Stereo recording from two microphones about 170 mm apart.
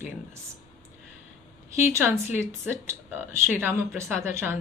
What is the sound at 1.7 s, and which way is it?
Speech, 15° right (ahead or behind).